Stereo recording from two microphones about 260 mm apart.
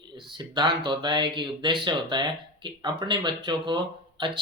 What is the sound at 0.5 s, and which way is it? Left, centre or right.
Speech, centre.